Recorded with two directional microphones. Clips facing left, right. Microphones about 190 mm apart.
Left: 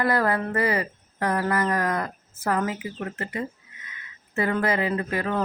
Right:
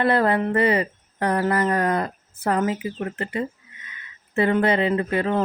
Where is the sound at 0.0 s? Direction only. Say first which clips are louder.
Right 4 dB; 25° right (ahead or behind).